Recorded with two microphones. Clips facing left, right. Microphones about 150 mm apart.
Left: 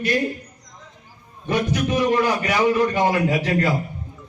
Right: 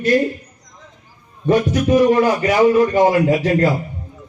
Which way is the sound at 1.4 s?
40° right (ahead or behind).